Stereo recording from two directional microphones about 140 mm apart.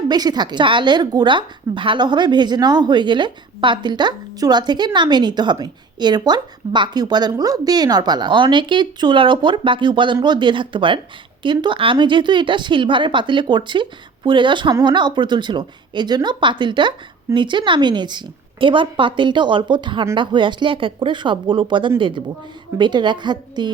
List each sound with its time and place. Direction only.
0.1 s a woman's voice: 30° right (ahead or behind)